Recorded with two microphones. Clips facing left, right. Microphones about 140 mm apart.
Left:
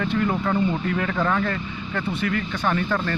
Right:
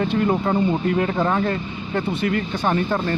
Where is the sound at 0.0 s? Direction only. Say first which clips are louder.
Right 3 dB; 25° right (ahead or behind).